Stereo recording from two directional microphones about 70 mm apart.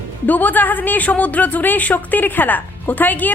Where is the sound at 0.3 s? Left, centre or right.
Left.